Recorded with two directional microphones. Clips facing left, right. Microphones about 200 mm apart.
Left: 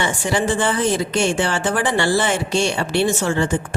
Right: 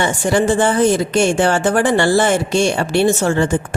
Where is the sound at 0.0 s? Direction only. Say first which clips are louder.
Right 5 dB; 45° right (ahead or behind).